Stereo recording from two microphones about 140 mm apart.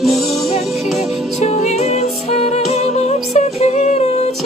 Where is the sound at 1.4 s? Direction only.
50° left (ahead or behind).